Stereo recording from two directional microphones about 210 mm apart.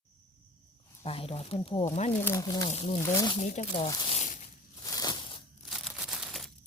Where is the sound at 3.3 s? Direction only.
30° left (ahead or behind).